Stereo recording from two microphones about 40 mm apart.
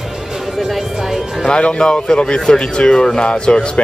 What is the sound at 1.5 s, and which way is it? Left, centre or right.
Speech, left.